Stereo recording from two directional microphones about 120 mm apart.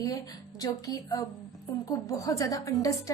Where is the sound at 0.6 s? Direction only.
30° left (ahead or behind).